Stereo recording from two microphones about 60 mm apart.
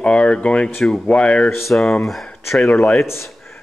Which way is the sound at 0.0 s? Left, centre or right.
Centre.